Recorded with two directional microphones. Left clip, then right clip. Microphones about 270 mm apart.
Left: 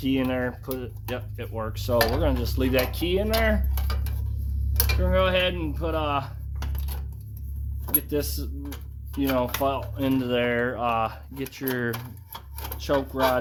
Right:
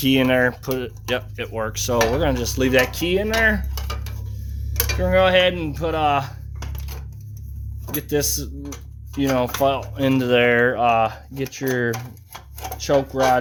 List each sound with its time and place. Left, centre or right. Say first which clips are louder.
0.0 s speech: right 9 dB; right
4.9 s speech: right 7 dB; right
7.9 s speech: right 6 dB; right